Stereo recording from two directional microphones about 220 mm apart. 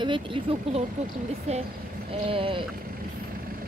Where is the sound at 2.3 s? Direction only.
25° right (ahead or behind).